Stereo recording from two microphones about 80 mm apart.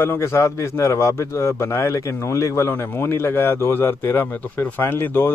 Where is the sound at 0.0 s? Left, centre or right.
Left.